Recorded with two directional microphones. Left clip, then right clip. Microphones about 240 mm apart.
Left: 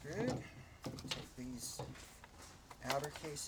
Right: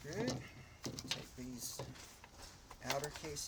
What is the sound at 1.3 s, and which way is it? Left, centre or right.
Speech, centre.